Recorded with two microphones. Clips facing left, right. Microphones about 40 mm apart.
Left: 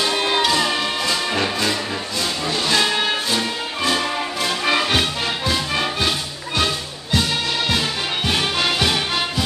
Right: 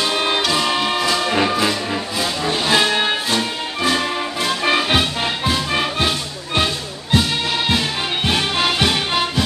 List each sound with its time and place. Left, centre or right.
0.0 s music: centre
3.3 s music: centre
4.8 s music: centre
8.3 s music: centre